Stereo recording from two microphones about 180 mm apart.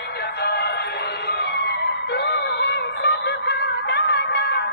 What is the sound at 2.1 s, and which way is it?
Synthetic singing, 70° left (ahead or behind).